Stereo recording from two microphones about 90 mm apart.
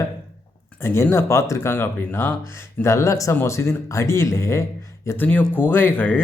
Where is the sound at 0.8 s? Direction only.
30° left (ahead or behind).